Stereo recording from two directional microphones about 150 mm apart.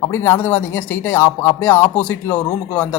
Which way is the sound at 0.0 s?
15° left (ahead or behind).